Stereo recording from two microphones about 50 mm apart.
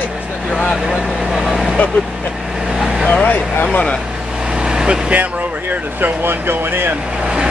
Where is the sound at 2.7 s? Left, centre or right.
Centre.